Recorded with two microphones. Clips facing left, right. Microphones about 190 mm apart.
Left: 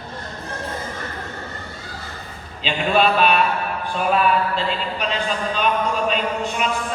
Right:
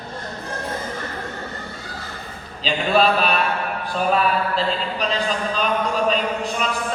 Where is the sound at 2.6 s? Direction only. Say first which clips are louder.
Even; 35° right (ahead or behind).